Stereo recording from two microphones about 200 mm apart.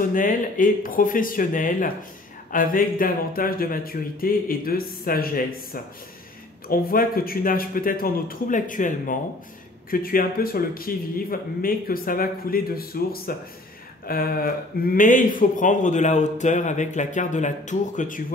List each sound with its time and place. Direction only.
0.0 s speech: 40° left (ahead or behind)